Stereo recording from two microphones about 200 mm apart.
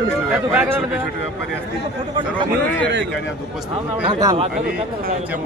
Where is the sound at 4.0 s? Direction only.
20° right (ahead or behind).